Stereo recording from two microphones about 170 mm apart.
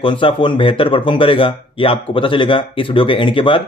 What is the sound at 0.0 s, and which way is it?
Speech, 30° left (ahead or behind).